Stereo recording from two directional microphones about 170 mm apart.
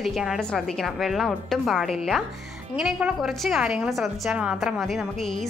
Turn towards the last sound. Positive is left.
turn(degrees=0)  # may be behind; listen again after turning